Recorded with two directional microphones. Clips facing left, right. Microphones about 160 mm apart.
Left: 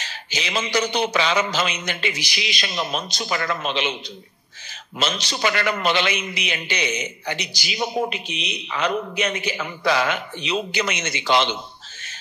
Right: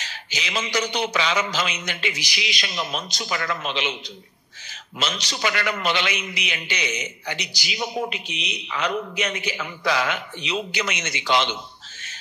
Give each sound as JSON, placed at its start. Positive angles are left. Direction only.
{"t": 0.0, "sound": "a man's voice", "side_deg": 30}
{"t": 4.9, "sound": "a man's voice", "side_deg": 30}